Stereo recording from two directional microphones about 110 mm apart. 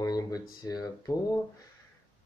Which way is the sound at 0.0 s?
35° left (ahead or behind).